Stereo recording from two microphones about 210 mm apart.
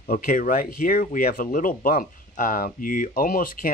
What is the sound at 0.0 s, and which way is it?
Speech, 40° left (ahead or behind).